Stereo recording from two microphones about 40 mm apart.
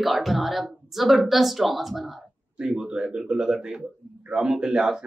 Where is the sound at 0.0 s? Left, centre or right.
Centre.